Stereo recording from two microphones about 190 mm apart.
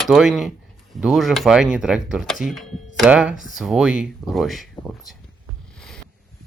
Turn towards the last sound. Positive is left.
turn(degrees=0)  # may be behind; listen again after turning